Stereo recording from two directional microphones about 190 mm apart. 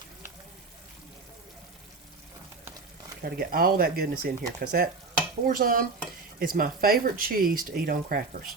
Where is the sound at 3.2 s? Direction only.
55° right (ahead or behind).